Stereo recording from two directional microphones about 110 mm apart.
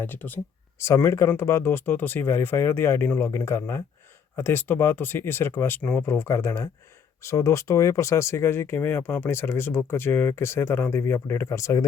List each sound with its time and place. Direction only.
0.0 s speech: 15° left (ahead or behind)